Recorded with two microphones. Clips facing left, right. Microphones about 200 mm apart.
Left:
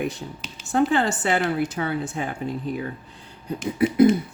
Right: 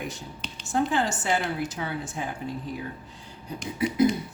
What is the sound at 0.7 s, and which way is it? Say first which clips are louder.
Speech: left 5 dB; 60° left (ahead or behind).